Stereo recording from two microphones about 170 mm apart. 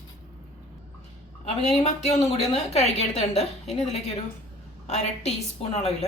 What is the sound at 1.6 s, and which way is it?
A woman's voice, 40° left (ahead or behind).